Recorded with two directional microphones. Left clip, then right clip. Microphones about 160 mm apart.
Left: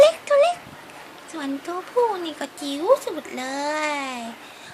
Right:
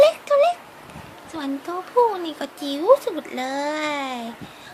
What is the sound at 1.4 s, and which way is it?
Speech, 15° right (ahead or behind).